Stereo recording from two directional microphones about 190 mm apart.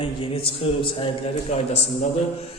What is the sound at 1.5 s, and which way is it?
Speech, 40° left (ahead or behind).